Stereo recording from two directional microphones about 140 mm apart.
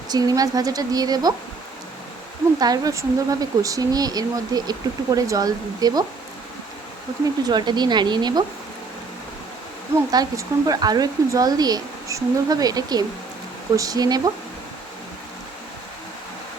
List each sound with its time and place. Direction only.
0.1 s speech: 25° right (ahead or behind)
2.6 s speech: 25° right (ahead or behind)
7.4 s speech: 30° right (ahead or behind)
10.1 s speech: 25° right (ahead or behind)